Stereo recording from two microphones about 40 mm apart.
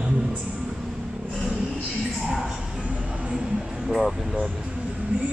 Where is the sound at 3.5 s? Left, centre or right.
Right.